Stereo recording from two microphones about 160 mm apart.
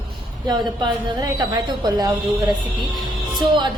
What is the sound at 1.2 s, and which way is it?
Speech, 25° right (ahead or behind).